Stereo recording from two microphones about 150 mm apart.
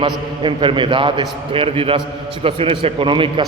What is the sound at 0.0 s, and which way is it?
A man's voice, 35° right (ahead or behind).